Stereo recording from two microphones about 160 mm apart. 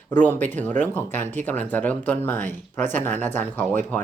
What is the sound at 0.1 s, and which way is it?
Speech, 10° left (ahead or behind).